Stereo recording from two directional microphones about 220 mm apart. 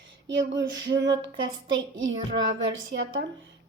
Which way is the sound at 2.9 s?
55° right (ahead or behind).